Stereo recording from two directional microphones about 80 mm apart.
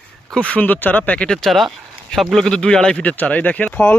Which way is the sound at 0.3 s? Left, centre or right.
Centre.